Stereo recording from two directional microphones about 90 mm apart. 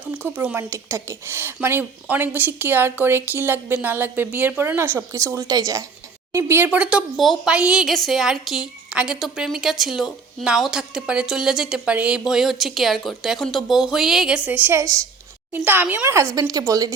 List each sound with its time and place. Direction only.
0.1 s speech: 20° right (ahead or behind)
0.7 s speech: 30° right (ahead or behind)
6.3 s speech: 30° right (ahead or behind)
6.7 s a woman's voice: 10° right (ahead or behind)
7.2 s a woman's voice: centre (ahead or behind)
7.5 s a woman's voice: 10° right (ahead or behind)
7.9 s a woman's voice: centre (ahead or behind); by 14.7 s 15° right (ahead or behind)
14.7 s speech: 35° right (ahead or behind)
15.5 s speech: 20° right (ahead or behind)
16.3 s a woman's voice: 45° right (ahead or behind)